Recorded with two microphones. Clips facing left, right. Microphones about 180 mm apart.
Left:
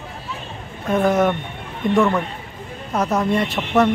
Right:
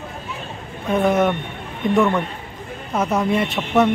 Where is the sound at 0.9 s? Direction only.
Centre (ahead or behind).